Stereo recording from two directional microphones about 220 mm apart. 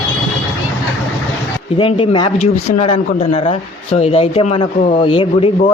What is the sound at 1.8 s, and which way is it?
Speech, 25° left (ahead or behind).